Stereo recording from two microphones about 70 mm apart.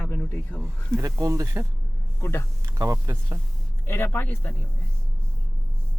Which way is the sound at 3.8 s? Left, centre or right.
Left.